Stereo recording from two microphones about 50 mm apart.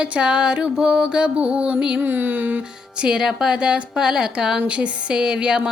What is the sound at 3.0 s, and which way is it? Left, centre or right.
Speech, centre.